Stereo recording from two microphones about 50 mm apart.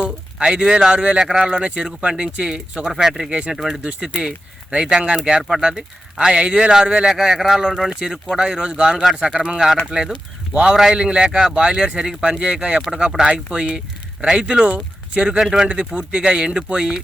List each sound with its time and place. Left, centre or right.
0.0 s speech: centre
10.1 s speech: right
10.7 s speech: centre